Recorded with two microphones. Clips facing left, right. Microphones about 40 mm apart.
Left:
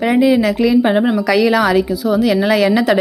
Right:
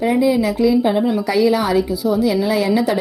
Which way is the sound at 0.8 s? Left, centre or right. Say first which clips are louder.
Left 3 dB; left.